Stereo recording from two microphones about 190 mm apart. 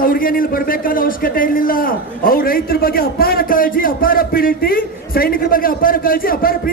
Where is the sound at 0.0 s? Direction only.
50° left (ahead or behind).